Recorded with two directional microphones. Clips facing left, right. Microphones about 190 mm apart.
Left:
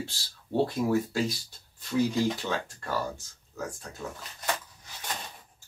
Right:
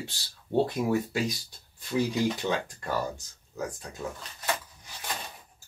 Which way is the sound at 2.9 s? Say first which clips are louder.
Right 1 dB; 15° right (ahead or behind).